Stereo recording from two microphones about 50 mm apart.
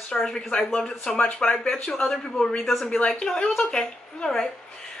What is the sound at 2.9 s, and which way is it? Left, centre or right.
Speech, left.